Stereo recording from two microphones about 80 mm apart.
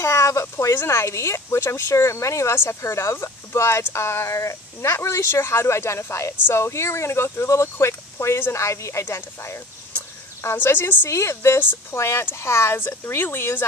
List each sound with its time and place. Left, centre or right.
0.0 s speech: left